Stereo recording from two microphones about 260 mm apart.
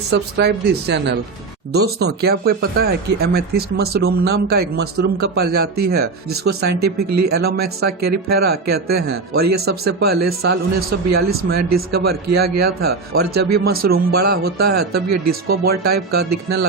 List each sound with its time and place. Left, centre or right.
0.1 s speech: right
6.8 s speech: right
7.3 s speech: right